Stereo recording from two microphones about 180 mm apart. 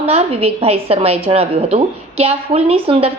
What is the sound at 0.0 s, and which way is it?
A woman's voice, 35° right (ahead or behind).